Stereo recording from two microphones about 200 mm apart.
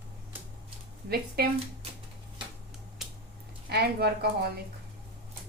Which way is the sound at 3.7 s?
55° right (ahead or behind).